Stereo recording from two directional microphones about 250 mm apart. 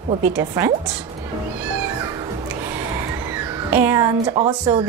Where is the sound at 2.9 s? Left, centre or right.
Centre.